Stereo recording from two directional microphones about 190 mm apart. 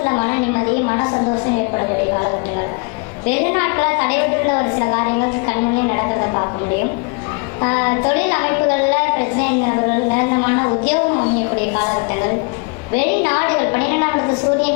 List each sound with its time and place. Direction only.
0.0 s a sound: 20° left (ahead or behind)
3.2 s a woman's voice: 15° left (ahead or behind)
7.6 s a woman's voice: 20° left (ahead or behind)